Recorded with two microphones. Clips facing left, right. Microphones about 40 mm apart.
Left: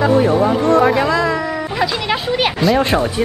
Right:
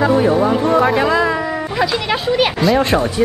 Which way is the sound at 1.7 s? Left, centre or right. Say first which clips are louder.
Right 1 dB; centre.